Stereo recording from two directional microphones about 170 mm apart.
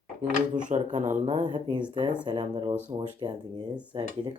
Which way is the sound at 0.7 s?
45° right (ahead or behind).